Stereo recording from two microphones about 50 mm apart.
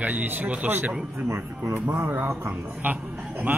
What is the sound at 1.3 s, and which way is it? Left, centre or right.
Speech, right.